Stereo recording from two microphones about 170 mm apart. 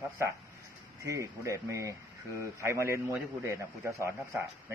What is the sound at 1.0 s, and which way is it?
Speech, 15° right (ahead or behind).